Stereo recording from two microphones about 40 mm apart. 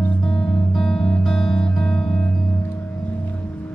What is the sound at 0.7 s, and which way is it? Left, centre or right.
Music, centre.